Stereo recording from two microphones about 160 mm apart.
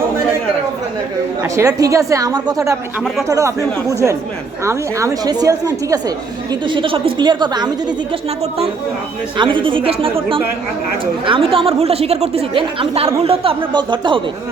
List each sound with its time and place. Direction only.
1.5 s a woman's voice: 20° right (ahead or behind)
9.4 s a woman's voice: 30° right (ahead or behind)